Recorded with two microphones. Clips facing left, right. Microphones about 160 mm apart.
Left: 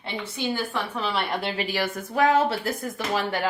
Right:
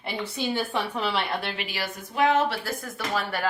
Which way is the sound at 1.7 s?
50° left (ahead or behind).